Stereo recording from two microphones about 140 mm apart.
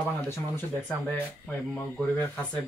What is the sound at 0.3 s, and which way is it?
Speech, 15° left (ahead or behind).